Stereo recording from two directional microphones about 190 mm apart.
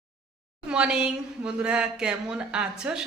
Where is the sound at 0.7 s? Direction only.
5° right (ahead or behind).